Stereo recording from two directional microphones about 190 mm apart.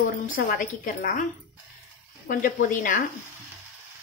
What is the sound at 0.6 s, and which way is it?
Speech, 45° left (ahead or behind).